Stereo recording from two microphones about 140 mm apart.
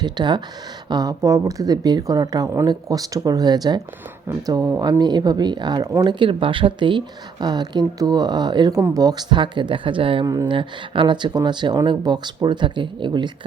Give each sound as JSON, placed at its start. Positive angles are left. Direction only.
{"t": 0.0, "sound": "speech", "side_deg": -30}
{"t": 6.1, "sound": "speech", "side_deg": -35}
{"t": 10.2, "sound": "speech", "side_deg": -30}